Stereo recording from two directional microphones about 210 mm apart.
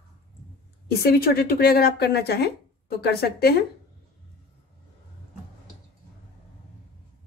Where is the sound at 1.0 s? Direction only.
45° left (ahead or behind).